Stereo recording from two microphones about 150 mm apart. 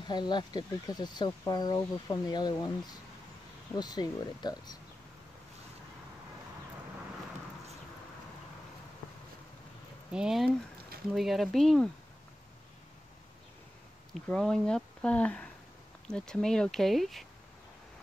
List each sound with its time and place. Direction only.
0.0 s speech: 30° left (ahead or behind)
10.1 s speech: 5° right (ahead or behind)
14.1 s speech: 5° left (ahead or behind)